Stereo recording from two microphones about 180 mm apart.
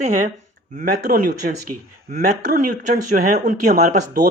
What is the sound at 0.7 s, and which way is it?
Speech, 50° right (ahead or behind).